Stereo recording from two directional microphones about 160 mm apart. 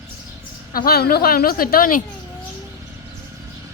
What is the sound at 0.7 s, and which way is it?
A woman's voice, 65° left (ahead or behind).